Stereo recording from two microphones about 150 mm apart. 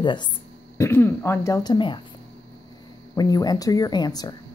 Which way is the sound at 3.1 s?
25° left (ahead or behind).